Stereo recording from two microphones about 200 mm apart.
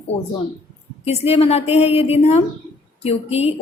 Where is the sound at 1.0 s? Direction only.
30° left (ahead or behind).